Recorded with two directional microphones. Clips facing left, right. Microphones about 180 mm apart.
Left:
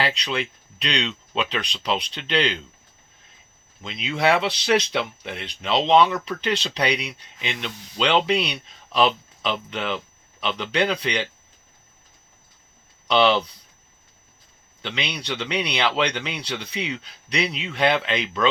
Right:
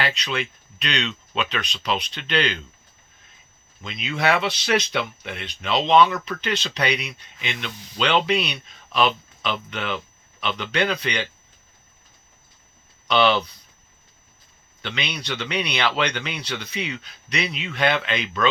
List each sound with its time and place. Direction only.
0.0 s speech: 30° left (ahead or behind)
3.8 s speech: 30° left (ahead or behind)
13.1 s speech: 30° left (ahead or behind)
14.8 s speech: 30° left (ahead or behind)